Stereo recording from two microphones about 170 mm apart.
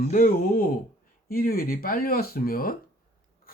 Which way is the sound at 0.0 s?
55° left (ahead or behind).